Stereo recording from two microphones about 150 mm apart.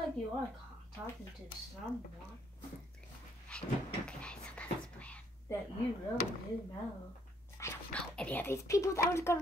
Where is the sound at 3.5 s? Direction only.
5° left (ahead or behind).